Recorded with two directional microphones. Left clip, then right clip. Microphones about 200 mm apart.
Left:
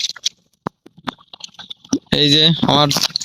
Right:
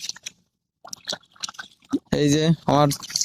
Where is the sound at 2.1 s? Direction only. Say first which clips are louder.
Left 9 dB; 5° right (ahead or behind).